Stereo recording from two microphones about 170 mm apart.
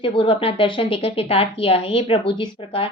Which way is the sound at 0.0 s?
30° left (ahead or behind).